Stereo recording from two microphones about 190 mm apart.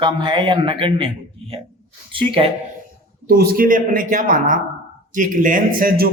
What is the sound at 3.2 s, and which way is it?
Speech, 55° right (ahead or behind).